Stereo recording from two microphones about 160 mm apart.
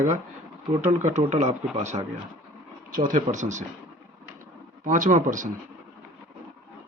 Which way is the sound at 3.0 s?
50° right (ahead or behind).